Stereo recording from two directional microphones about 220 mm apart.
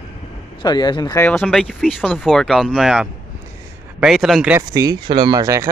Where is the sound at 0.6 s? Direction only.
20° left (ahead or behind).